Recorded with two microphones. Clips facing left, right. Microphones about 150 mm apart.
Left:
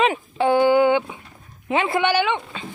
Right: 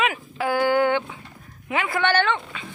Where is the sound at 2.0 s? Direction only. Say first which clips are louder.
Right 2 dB; 10° left (ahead or behind).